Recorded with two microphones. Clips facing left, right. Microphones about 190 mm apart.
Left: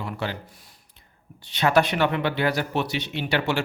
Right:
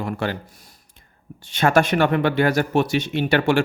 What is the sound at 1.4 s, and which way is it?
Speech, 50° right (ahead or behind).